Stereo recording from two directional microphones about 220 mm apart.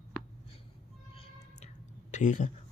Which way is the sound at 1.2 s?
30° left (ahead or behind).